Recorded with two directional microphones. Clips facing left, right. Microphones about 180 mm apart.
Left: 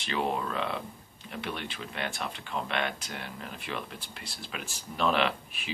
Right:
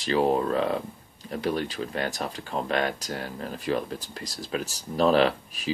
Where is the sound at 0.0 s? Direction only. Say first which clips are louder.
Right 8 dB; 35° right (ahead or behind).